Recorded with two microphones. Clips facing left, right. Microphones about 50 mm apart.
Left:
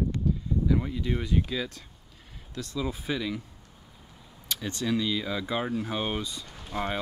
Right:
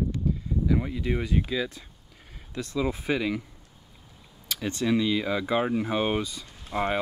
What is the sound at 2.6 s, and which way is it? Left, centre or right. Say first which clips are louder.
Speech: right 4 dB; right.